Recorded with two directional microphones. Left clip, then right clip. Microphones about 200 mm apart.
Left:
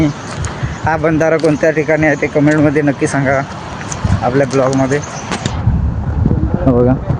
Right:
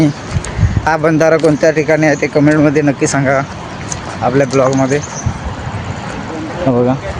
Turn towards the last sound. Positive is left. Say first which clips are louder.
# left 1 dB
turn(degrees=0)  # may be behind; listen again after turning